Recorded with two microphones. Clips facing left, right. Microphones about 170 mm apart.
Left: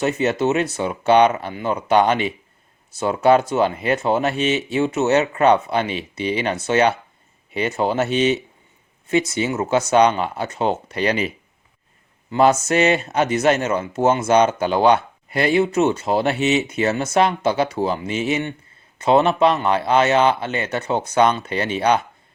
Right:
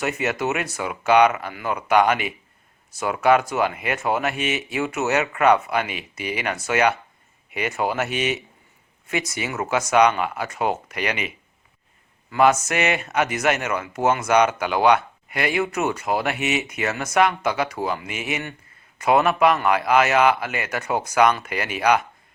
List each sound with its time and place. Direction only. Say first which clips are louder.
0.0 s speech: left 5 dB; 30° left (ahead or behind)
12.3 s speech: left 2 dB; 30° left (ahead or behind)